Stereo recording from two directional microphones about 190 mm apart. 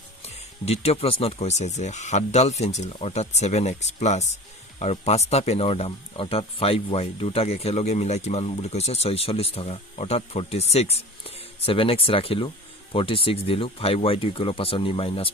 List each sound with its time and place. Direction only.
0.2 s speech: 35° left (ahead or behind)